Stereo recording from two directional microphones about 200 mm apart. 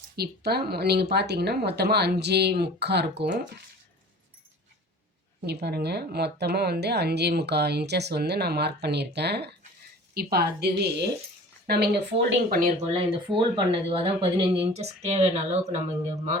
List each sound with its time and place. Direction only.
0.2 s a woman's voice: 50° right (ahead or behind)
5.5 s a woman's voice: 55° right (ahead or behind)
12.5 s a woman's voice: 40° right (ahead or behind)
12.9 s speech: 25° right (ahead or behind)